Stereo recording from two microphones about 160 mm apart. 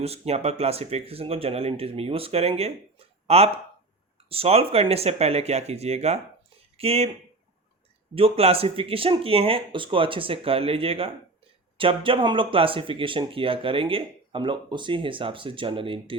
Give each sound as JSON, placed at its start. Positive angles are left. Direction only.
{"t": 0.0, "sound": "speech", "side_deg": -40}
{"t": 8.1, "sound": "speech", "side_deg": -40}